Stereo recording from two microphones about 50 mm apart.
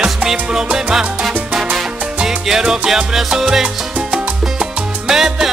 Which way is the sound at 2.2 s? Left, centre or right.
Centre.